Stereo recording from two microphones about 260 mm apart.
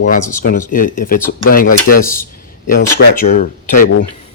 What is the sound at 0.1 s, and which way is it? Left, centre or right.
Speech, left.